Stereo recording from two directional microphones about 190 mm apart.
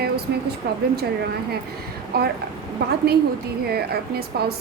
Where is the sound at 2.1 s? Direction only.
55° right (ahead or behind).